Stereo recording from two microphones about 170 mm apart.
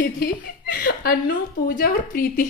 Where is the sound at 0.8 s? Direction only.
55° left (ahead or behind).